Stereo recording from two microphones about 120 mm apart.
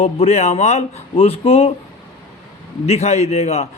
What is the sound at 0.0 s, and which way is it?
A man's voice, 65° left (ahead or behind).